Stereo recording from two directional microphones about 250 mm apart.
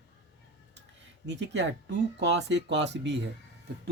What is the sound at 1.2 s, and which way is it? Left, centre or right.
Speech, right.